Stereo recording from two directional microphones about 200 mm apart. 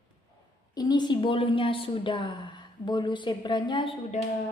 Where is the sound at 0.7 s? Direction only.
20° left (ahead or behind).